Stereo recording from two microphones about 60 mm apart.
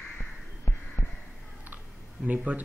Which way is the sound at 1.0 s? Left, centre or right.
Left.